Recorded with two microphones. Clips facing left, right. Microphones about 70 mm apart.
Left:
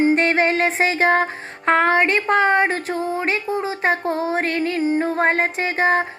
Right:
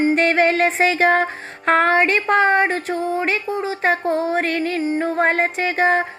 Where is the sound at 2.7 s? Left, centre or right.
Left.